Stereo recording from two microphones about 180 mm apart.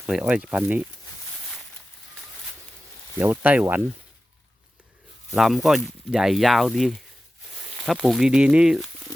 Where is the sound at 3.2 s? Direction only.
10° right (ahead or behind).